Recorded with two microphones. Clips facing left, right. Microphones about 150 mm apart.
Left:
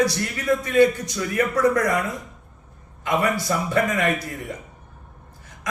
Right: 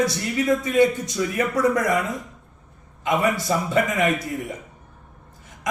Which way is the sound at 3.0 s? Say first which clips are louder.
Right 1 dB; 20° right (ahead or behind).